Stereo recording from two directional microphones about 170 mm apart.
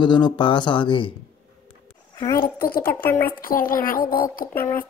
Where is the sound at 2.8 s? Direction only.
10° left (ahead or behind).